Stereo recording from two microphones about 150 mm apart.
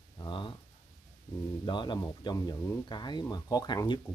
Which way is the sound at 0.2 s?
30° left (ahead or behind).